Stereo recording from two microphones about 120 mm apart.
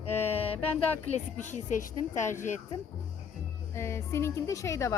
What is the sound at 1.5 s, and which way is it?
A woman's voice, 90° left.